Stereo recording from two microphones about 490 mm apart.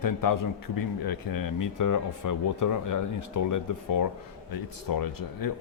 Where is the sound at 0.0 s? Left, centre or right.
Left.